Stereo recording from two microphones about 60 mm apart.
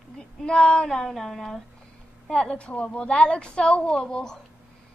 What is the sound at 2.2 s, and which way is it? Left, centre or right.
A woman's voice, centre.